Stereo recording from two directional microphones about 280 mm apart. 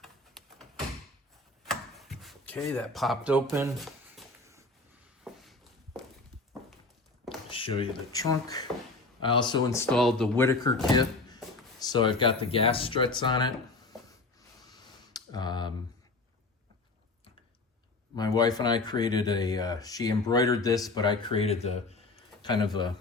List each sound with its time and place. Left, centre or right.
1.6 s a sound: centre
5.2 s walk: centre
7.5 s speech: centre
11.8 s speech: centre
14.6 s a sound: centre
18.2 s speech: centre